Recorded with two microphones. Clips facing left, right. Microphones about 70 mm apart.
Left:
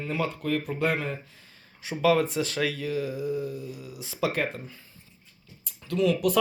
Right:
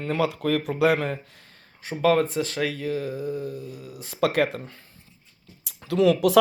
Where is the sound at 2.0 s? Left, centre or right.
Right.